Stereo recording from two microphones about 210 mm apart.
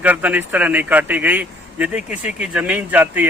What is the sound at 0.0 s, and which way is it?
A man's voice, 10° right (ahead or behind).